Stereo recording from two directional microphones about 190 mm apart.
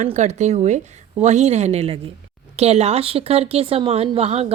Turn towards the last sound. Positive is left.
turn(degrees=-35)  # may be behind; listen again after turning